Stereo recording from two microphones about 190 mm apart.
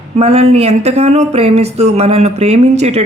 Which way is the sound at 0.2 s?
35° right (ahead or behind).